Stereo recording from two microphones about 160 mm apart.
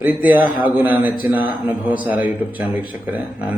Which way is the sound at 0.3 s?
60° left (ahead or behind).